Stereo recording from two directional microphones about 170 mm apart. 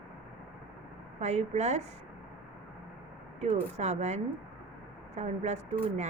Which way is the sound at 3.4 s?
40° right (ahead or behind).